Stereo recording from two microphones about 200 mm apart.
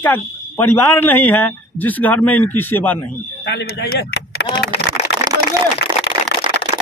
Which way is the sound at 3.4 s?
60° left (ahead or behind).